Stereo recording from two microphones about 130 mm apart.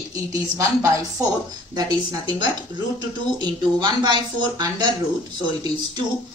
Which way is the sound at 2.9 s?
35° right (ahead or behind).